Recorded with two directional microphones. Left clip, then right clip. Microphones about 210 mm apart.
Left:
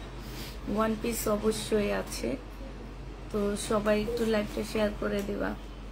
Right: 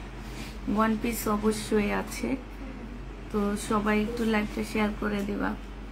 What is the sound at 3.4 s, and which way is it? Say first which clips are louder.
A woman's voice: even; 15° right (ahead or behind).